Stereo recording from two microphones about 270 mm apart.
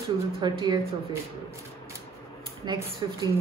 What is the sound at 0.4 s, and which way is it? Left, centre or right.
Speech, centre.